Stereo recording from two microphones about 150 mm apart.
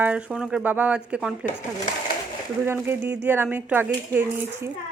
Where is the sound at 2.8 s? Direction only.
15° right (ahead or behind).